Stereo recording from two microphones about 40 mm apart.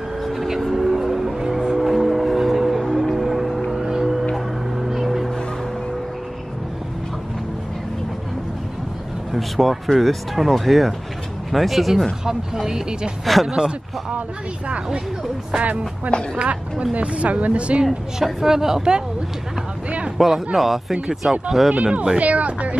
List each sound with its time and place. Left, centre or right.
0.2 s a sound: centre
0.7 s vehicle: centre
1.5 s music: centre
4.7 s vehicle: centre
9.3 s speech: centre
12.5 s a woman's voice: centre
13.2 s speech: centre
13.5 s a woman's voice: centre
16.1 s speech: left
16.9 s speech: right
17.8 s a woman's voice: centre
20.2 s a woman's voice: centre
22.1 s a sound: right